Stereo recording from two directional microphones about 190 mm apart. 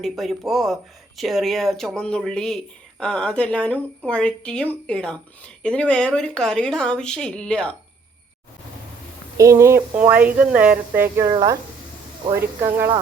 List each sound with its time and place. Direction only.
0.0 s speech: centre (ahead or behind)
9.4 s speech: 15° right (ahead or behind)
11.3 s speech: 25° right (ahead or behind)
12.6 s speech: 10° right (ahead or behind)